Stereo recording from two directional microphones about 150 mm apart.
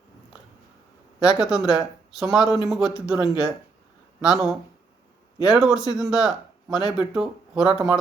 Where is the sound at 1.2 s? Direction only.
5° right (ahead or behind).